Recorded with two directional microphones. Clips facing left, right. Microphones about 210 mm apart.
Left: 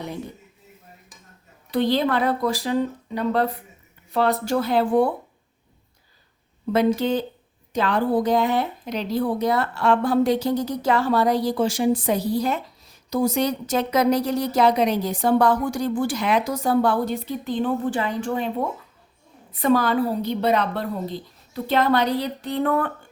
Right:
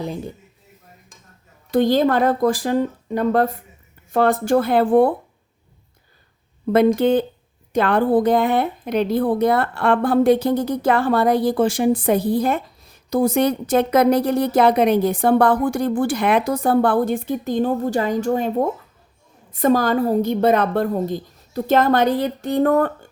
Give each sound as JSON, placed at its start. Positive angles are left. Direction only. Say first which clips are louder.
{"t": 1.7, "sound": "a woman's voice", "louder": "right 5 dB", "side_deg": -45}
{"t": 6.7, "sound": "a woman's voice", "louder": "right 5 dB", "side_deg": -55}